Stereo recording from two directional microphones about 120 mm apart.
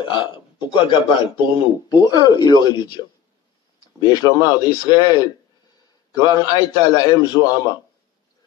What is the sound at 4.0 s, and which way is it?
A man's voice, 35° left (ahead or behind).